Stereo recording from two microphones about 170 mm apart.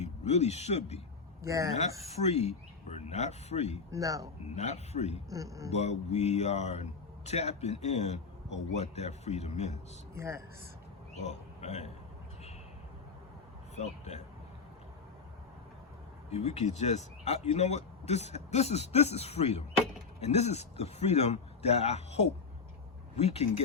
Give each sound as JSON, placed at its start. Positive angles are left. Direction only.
{"t": 0.0, "sound": "speech", "side_deg": 40}
{"t": 1.4, "sound": "speech", "side_deg": -20}
{"t": 2.0, "sound": "speech", "side_deg": 40}
{"t": 3.9, "sound": "a man's voice", "side_deg": -20}
{"t": 4.4, "sound": "speech", "side_deg": 40}
{"t": 5.3, "sound": "a man's voice", "side_deg": -20}
{"t": 5.7, "sound": "speech", "side_deg": 40}
{"t": 10.2, "sound": "speech", "side_deg": -15}
{"t": 11.2, "sound": "speech", "side_deg": 40}
{"t": 13.7, "sound": "speech", "side_deg": 40}
{"t": 16.3, "sound": "speech", "side_deg": 40}